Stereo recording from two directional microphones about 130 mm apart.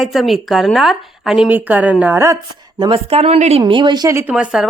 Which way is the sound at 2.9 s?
50° right (ahead or behind).